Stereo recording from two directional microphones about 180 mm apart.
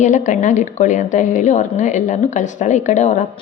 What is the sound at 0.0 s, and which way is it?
A woman's voice, 45° left (ahead or behind).